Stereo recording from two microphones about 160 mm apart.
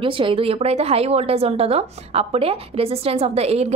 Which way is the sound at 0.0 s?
35° right (ahead or behind).